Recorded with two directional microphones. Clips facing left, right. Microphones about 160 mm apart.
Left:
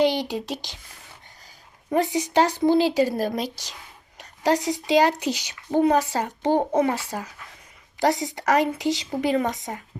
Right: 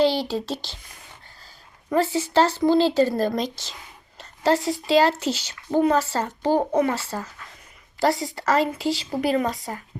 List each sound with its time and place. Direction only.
0.0 s speech: 15° left (ahead or behind)
1.9 s a child's voice: 15° left (ahead or behind)